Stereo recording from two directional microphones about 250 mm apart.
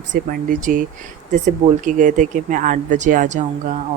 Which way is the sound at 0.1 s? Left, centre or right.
Right.